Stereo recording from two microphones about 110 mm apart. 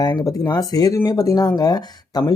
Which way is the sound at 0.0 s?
35° left (ahead or behind).